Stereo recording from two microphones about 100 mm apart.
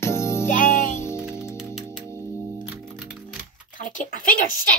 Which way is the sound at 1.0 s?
25° left (ahead or behind).